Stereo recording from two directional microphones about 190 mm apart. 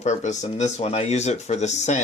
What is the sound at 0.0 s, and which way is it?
Speech, 40° left (ahead or behind).